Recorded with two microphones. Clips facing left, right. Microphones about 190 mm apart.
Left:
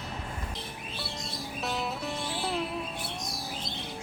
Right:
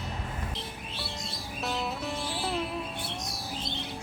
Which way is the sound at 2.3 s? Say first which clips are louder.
Left 1 dB; centre (ahead or behind).